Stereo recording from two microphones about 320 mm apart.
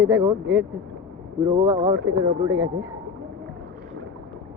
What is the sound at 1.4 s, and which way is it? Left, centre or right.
Speech, centre.